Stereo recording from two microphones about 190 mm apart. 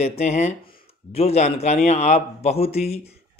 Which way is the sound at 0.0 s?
35° left (ahead or behind).